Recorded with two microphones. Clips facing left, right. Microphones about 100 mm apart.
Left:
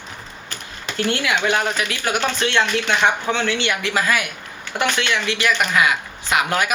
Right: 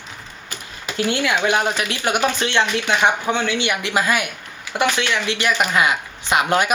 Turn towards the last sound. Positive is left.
turn(degrees=-25)  # may be behind; listen again after turning